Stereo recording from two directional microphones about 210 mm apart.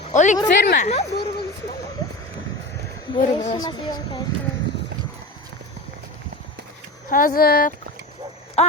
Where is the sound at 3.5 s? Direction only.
20° left (ahead or behind).